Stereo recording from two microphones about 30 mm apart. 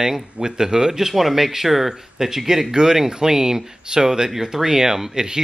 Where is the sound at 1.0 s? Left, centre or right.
Centre.